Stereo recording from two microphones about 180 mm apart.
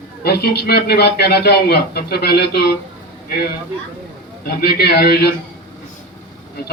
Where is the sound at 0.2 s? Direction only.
60° left (ahead or behind).